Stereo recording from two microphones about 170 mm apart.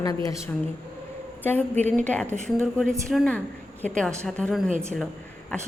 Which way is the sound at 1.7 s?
40° right (ahead or behind).